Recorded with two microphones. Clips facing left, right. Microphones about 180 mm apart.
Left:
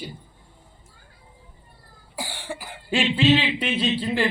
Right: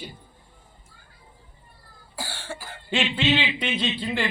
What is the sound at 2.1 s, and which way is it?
Cough, 15° left (ahead or behind).